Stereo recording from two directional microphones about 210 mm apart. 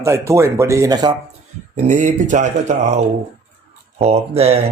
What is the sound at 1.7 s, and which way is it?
Speech, 35° right (ahead or behind).